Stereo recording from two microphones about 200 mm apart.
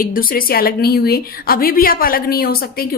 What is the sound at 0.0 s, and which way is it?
A woman's voice, 45° left (ahead or behind).